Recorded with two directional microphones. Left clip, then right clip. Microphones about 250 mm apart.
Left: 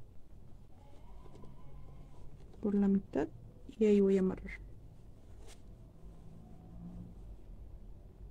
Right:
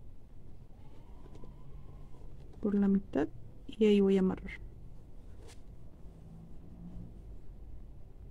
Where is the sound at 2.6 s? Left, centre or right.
Centre.